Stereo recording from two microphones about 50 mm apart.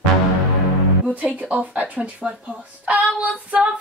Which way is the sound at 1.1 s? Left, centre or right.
Right.